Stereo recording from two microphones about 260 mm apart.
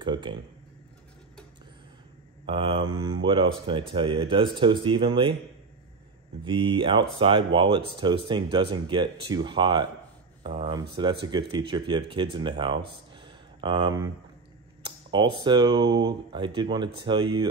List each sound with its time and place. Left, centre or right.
0.0 s speech: centre
2.4 s speech: right
6.4 s speech: centre
13.1 s a sound: centre
15.0 s speech: centre